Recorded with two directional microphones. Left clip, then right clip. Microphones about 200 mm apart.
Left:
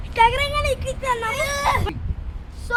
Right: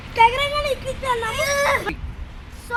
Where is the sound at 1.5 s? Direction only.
60° left (ahead or behind).